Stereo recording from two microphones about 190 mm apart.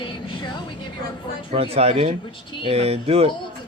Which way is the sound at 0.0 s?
25° left (ahead or behind).